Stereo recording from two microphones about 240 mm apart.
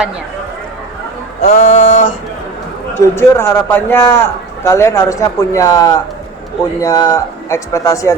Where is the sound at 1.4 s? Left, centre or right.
Left.